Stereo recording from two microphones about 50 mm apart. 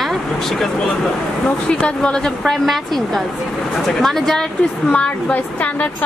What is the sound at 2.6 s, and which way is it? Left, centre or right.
Speech, centre.